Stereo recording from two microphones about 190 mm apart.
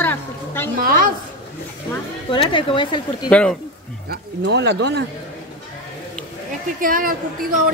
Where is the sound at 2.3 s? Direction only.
25° left (ahead or behind).